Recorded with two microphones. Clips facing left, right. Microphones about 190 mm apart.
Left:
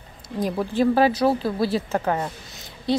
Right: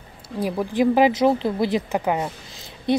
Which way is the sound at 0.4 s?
10° right (ahead or behind).